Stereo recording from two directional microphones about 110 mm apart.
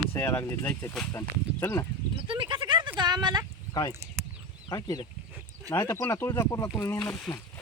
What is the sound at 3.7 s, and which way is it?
Speech, 35° left (ahead or behind).